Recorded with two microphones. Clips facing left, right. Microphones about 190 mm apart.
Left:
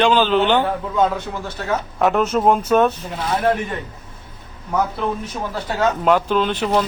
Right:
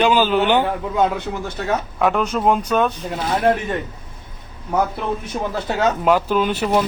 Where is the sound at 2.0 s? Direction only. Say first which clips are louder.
Left 2 dB; 5° left (ahead or behind).